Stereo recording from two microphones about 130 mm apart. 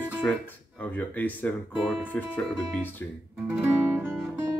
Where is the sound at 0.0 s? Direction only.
15° left (ahead or behind).